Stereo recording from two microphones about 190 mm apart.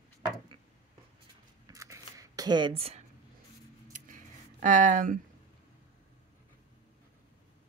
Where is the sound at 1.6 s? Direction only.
15° right (ahead or behind).